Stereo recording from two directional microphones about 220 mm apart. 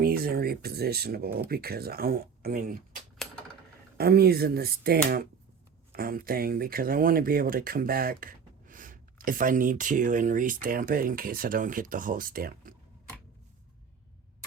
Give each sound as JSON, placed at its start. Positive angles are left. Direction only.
{"t": 0.0, "sound": "speech", "side_deg": -45}